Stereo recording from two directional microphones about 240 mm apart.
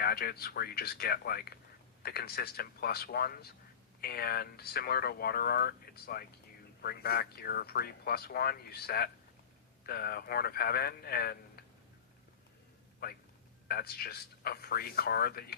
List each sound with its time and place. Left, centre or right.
0.0 s speech: left
13.0 s speech: left